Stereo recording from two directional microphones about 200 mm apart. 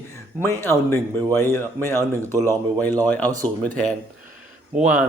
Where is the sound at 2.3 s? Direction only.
15° right (ahead or behind).